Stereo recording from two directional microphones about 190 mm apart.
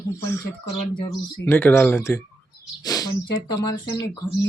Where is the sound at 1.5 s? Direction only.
10° left (ahead or behind).